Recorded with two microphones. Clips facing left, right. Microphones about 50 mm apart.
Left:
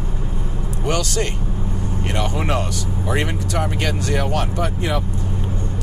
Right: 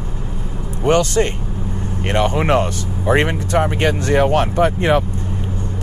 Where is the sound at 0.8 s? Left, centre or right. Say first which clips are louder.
Right 7 dB; right.